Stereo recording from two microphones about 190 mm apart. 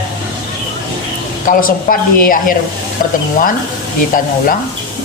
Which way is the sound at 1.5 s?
45° left (ahead or behind).